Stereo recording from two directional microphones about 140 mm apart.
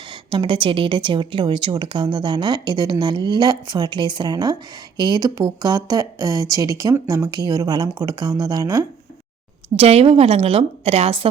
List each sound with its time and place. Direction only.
0.1 s a woman's voice: 35° right (ahead or behind)
9.7 s a woman's voice: 45° right (ahead or behind)